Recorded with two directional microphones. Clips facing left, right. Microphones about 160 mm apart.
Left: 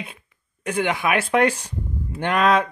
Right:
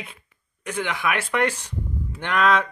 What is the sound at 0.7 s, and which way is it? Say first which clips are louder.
Speech: left 4 dB; 45° left (ahead or behind).